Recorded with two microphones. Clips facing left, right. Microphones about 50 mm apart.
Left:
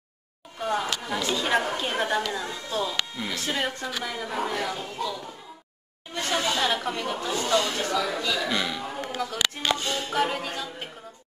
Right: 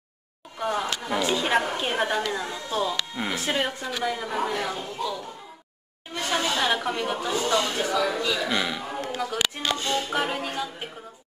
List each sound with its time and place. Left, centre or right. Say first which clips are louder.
0.6 s a woman's voice: even; centre
1.1 s a woman's voice: right 2 dB; centre
6.1 s a sound: right 1 dB; centre
6.5 s speech: right 1 dB; centre